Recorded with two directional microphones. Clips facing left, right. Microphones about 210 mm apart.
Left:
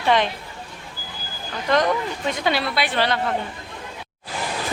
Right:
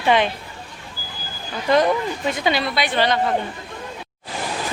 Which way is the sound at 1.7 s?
10° right (ahead or behind).